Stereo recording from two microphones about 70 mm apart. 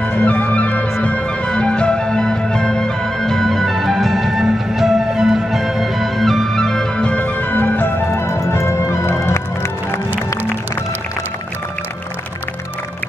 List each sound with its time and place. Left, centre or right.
0.0 s music: centre
8.1 s music: left